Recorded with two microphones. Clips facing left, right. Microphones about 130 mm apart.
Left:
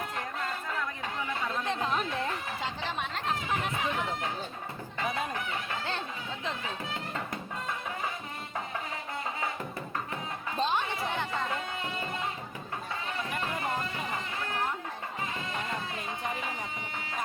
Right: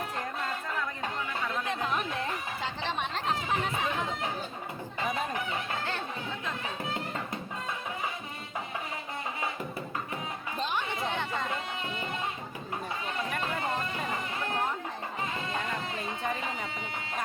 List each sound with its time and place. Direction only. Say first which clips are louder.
1.5 s chatter: left 1 dB; 25° left (ahead or behind)
10.6 s music: left 4 dB; 20° left (ahead or behind)